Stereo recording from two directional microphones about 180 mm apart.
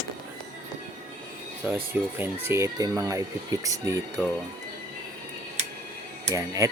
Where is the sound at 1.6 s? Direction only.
10° right (ahead or behind).